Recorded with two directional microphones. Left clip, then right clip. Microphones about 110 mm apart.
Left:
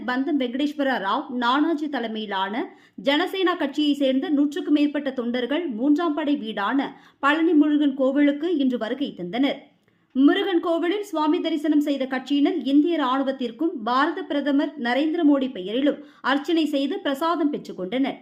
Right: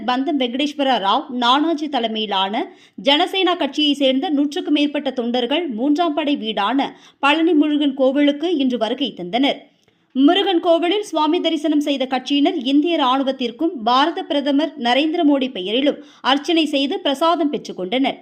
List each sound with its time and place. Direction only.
0.0 s a woman's voice: 15° right (ahead or behind)